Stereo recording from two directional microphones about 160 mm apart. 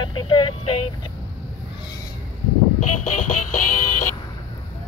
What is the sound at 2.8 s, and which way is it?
Music, 50° left (ahead or behind).